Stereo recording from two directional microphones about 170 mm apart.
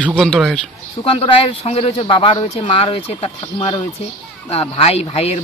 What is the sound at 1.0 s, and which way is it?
Speech, 30° left (ahead or behind).